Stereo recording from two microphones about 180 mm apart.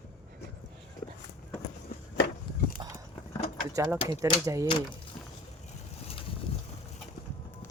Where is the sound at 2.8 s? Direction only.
25° right (ahead or behind).